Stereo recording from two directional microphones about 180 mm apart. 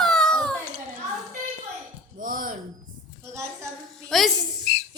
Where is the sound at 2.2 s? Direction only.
50° right (ahead or behind).